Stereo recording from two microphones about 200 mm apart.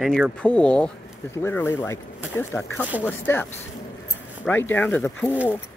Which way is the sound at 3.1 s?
10° left (ahead or behind).